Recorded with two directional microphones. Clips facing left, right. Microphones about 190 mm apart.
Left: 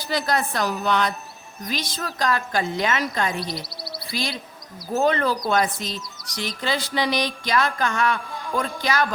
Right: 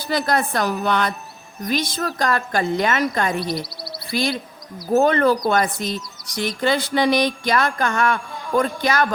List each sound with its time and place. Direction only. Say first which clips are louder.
0.1 s speech: right 3 dB; 55° right (ahead or behind)